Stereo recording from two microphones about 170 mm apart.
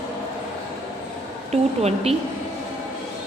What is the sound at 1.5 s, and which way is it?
Speech, 40° right (ahead or behind).